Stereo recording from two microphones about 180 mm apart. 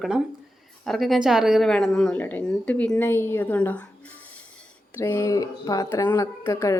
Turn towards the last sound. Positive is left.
turn(degrees=15)  # may be behind; listen again after turning